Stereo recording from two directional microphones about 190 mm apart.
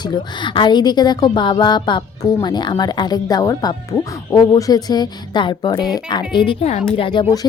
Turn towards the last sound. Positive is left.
turn(degrees=25)  # may be behind; listen again after turning